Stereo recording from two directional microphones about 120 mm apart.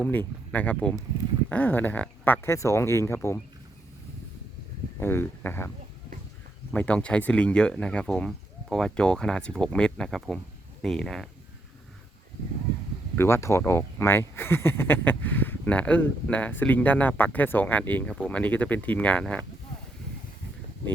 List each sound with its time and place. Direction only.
0.0 s speech: 15° left (ahead or behind)
4.9 s speech: 20° left (ahead or behind)
6.7 s speech: 10° left (ahead or behind)
13.1 s speech: 20° left (ahead or behind)